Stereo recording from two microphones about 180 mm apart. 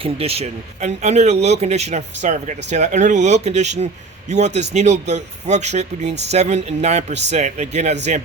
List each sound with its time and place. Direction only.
0.0 s speech: 35° right (ahead or behind)